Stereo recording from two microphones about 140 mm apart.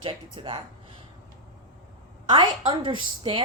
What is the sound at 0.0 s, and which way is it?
Speech, 40° right (ahead or behind).